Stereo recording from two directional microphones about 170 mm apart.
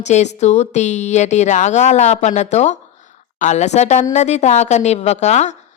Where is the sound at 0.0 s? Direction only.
40° left (ahead or behind).